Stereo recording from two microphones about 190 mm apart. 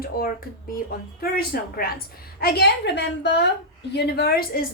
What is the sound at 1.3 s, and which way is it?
A woman's voice, 50° left (ahead or behind).